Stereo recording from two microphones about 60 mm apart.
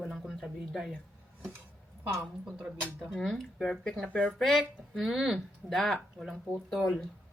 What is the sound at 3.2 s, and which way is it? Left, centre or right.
Speech, centre.